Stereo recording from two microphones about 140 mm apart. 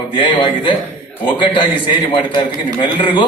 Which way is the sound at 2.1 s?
35° left (ahead or behind).